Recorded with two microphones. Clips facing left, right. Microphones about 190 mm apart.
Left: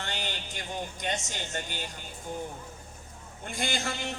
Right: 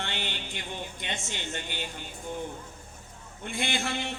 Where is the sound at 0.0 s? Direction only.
40° left (ahead or behind).